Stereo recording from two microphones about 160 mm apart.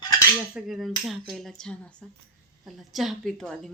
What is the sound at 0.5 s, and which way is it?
A woman's voice, centre (ahead or behind).